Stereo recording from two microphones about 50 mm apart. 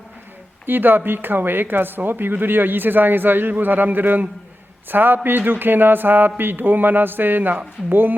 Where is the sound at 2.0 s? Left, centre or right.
Right.